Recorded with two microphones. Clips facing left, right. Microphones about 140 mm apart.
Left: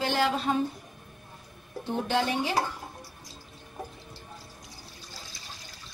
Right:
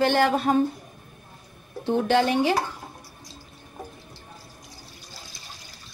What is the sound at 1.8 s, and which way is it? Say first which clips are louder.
Speech: right 7 dB; 75° right (ahead or behind).